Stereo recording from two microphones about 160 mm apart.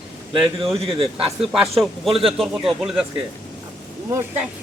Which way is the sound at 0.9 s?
35° right (ahead or behind).